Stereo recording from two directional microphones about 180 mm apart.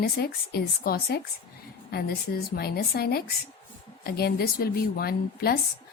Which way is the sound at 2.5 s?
60° left (ahead or behind).